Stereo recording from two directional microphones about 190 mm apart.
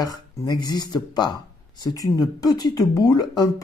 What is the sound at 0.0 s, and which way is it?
Speech, 20° left (ahead or behind).